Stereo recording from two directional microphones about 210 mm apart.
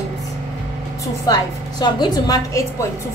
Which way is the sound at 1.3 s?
20° left (ahead or behind).